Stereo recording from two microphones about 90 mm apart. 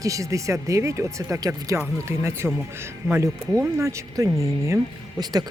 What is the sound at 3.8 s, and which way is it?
Speech, 35° right (ahead or behind).